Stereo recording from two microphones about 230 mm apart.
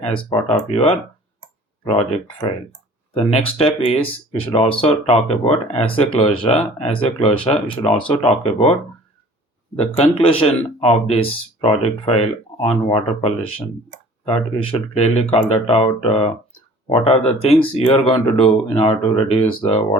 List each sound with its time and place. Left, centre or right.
0.3 s speech: left
9.7 s speech: left